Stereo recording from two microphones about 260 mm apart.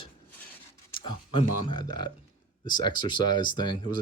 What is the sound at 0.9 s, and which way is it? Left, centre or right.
Speech, centre.